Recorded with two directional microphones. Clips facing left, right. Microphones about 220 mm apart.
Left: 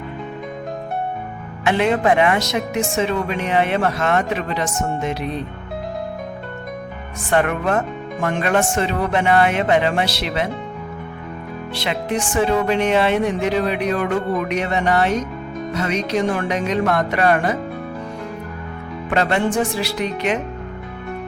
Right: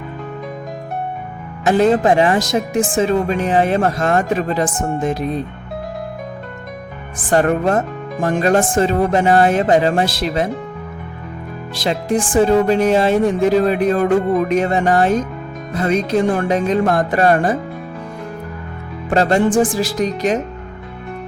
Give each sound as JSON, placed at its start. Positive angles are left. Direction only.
{"t": 1.6, "sound": "speech", "side_deg": -35}
{"t": 7.3, "sound": "speech", "side_deg": -35}
{"t": 12.4, "sound": "speech", "side_deg": -35}
{"t": 19.1, "sound": "speech", "side_deg": -35}